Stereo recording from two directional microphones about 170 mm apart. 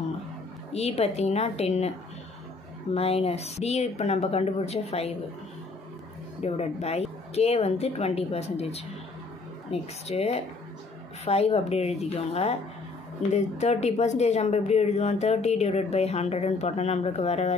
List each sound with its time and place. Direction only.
0.7 s speech: 40° left (ahead or behind)
2.9 s speech: 35° left (ahead or behind)
6.4 s speech: 40° left (ahead or behind)